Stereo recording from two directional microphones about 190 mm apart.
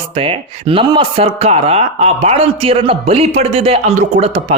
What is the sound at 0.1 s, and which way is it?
A man's voice, 30° right (ahead or behind).